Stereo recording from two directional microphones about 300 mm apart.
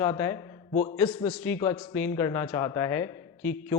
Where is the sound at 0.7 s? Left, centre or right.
Left.